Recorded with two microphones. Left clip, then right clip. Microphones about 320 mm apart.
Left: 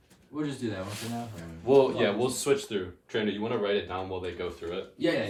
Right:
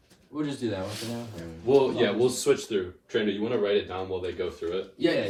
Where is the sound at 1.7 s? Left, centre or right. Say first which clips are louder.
Even; left.